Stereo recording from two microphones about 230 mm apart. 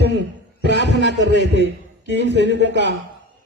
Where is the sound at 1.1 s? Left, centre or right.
Right.